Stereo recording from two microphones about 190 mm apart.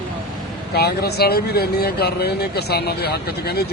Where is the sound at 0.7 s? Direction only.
55° left (ahead or behind).